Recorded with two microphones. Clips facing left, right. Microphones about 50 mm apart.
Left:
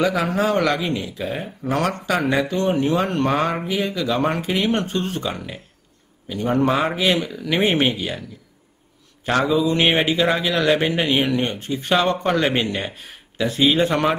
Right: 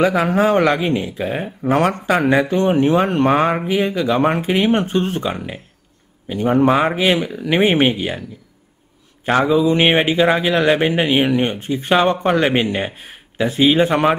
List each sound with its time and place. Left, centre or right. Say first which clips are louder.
0.0 s speech: right 5 dB; right